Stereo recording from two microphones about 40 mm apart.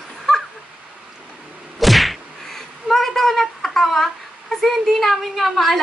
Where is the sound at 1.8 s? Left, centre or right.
Centre.